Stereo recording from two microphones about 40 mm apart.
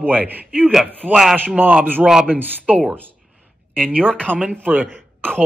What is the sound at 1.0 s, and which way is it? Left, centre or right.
A man's voice, right.